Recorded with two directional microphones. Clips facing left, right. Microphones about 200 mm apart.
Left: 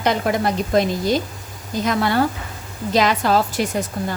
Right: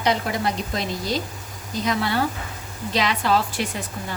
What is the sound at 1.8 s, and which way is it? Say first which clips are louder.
A woman's voice: left 4 dB; 50° left (ahead or behind).